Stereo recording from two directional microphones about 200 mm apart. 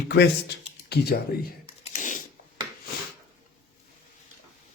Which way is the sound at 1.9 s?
40° left (ahead or behind).